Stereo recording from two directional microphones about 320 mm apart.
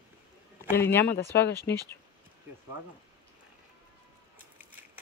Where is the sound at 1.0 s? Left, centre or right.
Left.